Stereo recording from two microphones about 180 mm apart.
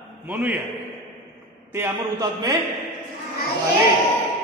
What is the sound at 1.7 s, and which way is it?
Speech, 15° right (ahead or behind).